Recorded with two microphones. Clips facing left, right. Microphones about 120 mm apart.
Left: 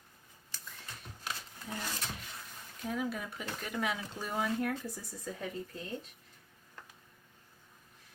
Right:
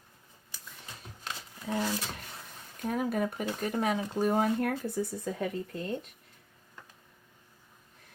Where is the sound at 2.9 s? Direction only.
50° right (ahead or behind).